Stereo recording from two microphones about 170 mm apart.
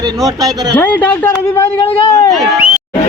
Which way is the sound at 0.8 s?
10° left (ahead or behind).